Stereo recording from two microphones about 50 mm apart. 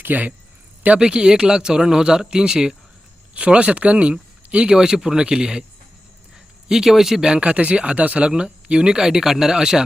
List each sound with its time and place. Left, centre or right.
0.0 s speech: right
0.9 s speech: centre
6.7 s speech: centre